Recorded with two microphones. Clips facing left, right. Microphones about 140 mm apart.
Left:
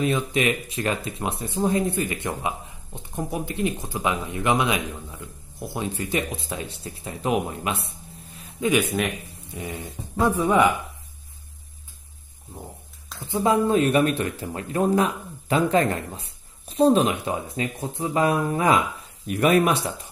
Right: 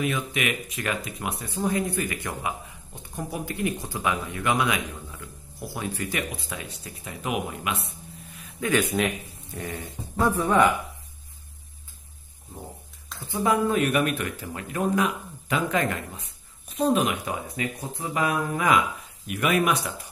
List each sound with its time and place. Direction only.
0.0 s speech: 30° left (ahead or behind)
8.4 s a sound: 25° left (ahead or behind)
9.0 s speech: centre (ahead or behind)
10.1 s speech: 15° left (ahead or behind)
13.2 s speech: 25° left (ahead or behind)